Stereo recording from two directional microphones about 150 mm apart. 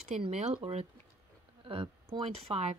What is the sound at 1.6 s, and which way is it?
Speech, 35° right (ahead or behind).